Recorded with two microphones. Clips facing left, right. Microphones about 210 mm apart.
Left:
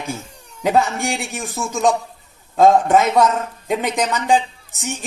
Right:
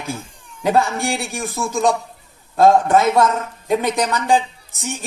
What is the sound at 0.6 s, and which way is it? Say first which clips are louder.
Speech: even; 15° left (ahead or behind).